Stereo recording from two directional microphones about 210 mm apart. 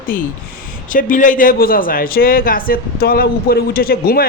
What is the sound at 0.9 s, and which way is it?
A man's voice, 40° left (ahead or behind).